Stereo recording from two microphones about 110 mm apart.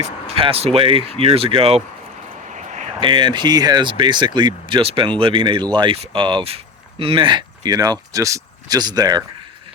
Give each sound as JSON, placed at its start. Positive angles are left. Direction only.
{"t": 0.4, "sound": "speech", "side_deg": -65}
{"t": 2.5, "sound": "a sound", "side_deg": -90}
{"t": 3.0, "sound": "speech", "side_deg": -45}